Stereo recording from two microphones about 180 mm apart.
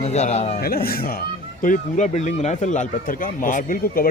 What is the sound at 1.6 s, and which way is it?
A man's voice, 45° left (ahead or behind).